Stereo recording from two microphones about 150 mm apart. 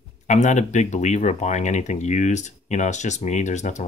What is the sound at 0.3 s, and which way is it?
Speech, 50° left (ahead or behind).